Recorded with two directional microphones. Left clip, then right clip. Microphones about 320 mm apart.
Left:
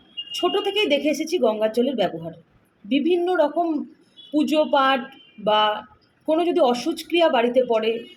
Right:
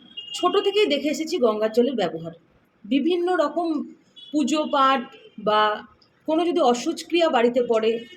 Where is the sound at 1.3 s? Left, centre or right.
Centre.